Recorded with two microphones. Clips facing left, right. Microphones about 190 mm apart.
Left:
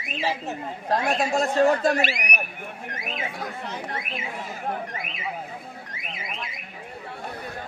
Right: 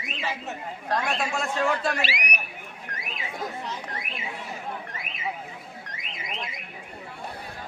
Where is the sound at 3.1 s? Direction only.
60° left (ahead or behind).